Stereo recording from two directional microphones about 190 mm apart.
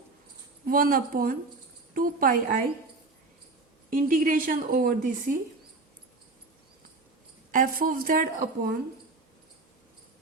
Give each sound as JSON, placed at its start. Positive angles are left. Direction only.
{"t": 0.6, "sound": "a woman's voice", "side_deg": -50}
{"t": 3.8, "sound": "a woman's voice", "side_deg": -45}
{"t": 7.5, "sound": "a woman's voice", "side_deg": -50}